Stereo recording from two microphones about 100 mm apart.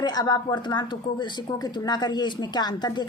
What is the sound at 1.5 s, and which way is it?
A woman's voice, 40° left (ahead or behind).